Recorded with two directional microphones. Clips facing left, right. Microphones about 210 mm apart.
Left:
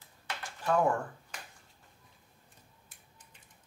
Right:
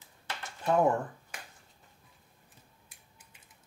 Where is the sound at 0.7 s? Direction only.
20° right (ahead or behind).